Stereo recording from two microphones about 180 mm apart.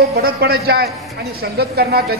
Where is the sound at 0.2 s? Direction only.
60° right (ahead or behind).